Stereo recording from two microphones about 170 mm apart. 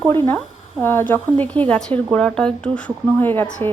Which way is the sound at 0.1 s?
15° left (ahead or behind).